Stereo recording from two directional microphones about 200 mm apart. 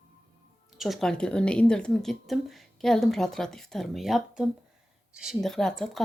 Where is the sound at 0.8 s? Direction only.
Centre (ahead or behind).